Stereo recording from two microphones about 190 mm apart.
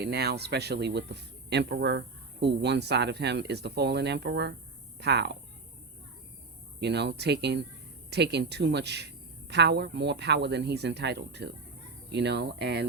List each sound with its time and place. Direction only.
0.0 s a man's voice: 60° right (ahead or behind)
6.7 s a man's voice: 65° right (ahead or behind)